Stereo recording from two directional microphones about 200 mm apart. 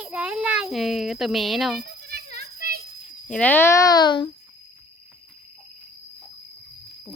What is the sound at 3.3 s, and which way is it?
Speech, 10° left (ahead or behind).